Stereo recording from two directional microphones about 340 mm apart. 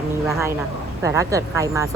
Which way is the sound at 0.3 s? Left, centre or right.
Centre.